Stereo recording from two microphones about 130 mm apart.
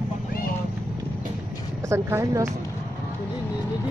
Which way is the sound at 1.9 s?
20° right (ahead or behind).